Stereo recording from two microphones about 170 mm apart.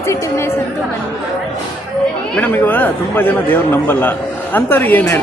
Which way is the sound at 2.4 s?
10° left (ahead or behind).